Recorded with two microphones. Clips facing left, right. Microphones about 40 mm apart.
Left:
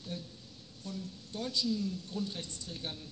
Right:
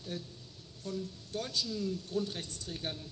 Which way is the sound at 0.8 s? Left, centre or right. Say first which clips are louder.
Right 3 dB; right.